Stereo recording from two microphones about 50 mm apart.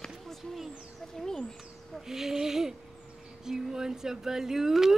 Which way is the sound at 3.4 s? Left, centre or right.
Centre.